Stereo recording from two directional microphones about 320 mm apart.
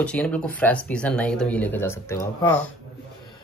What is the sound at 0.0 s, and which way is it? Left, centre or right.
Speech, centre.